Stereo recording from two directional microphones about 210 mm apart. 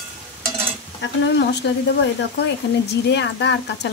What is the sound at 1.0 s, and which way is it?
Speech, 55° left (ahead or behind).